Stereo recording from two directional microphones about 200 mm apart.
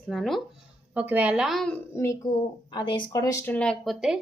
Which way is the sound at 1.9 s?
15° left (ahead or behind).